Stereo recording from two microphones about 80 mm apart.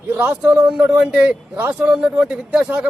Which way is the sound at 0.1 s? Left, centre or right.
Centre.